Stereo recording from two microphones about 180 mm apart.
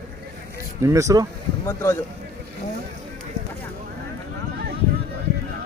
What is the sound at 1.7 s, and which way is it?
Speech, 15° left (ahead or behind).